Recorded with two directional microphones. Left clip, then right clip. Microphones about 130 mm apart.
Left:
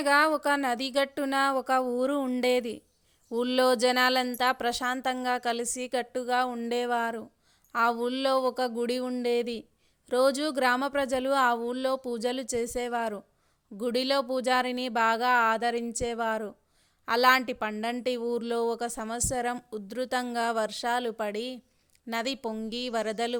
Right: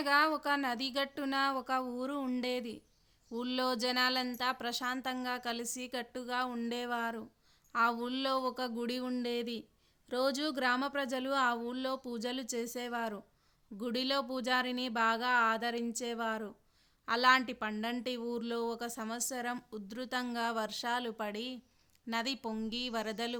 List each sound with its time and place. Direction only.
0.0 s speech: 50° left (ahead or behind)
2.4 s speech: 55° left (ahead or behind); by 23.4 s 40° left (ahead or behind)